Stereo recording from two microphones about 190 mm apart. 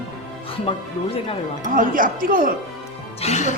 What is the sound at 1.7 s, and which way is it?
Speech, 45° right (ahead or behind).